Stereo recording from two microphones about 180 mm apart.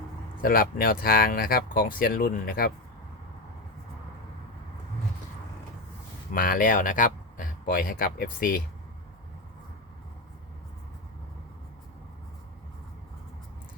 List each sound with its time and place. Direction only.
0.4 s speech: 55° left (ahead or behind)
6.3 s speech: 50° left (ahead or behind)